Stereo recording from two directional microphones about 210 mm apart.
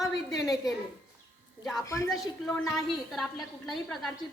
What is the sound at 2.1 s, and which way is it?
A woman's voice, centre (ahead or behind).